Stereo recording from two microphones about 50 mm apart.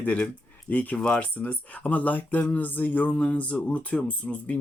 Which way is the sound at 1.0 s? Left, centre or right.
Centre.